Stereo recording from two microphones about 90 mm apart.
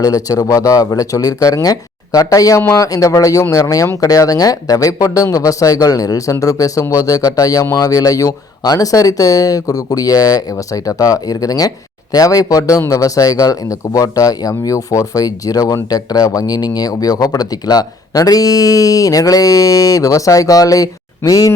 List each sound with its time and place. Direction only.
0.0 s speech: 40° left (ahead or behind)
2.6 s speech: 30° left (ahead or behind)
2.8 s speech: 40° left (ahead or behind)